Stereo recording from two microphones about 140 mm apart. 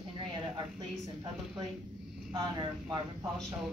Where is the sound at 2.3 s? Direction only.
30° right (ahead or behind).